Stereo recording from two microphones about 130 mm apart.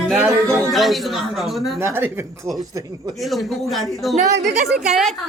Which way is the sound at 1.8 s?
20° right (ahead or behind).